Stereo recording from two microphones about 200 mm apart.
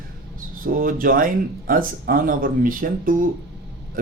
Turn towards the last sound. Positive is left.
turn(degrees=-45)  # may be behind; listen again after turning